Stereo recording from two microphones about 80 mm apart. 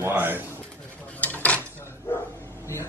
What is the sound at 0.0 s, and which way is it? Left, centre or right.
Pigeon, right.